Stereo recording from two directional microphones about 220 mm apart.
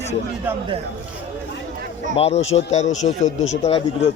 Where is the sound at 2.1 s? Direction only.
30° left (ahead or behind).